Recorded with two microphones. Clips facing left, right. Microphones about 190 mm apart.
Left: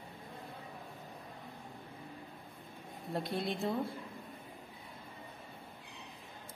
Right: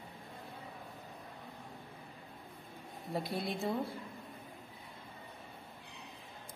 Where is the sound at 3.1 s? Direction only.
Centre (ahead or behind).